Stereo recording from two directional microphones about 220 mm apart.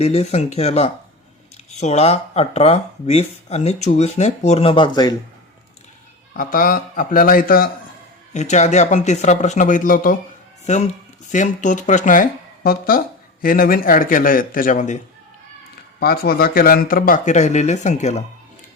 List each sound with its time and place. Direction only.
0.0 s speech: 30° left (ahead or behind)
6.3 s speech: 40° left (ahead or behind)
16.0 s speech: 45° left (ahead or behind)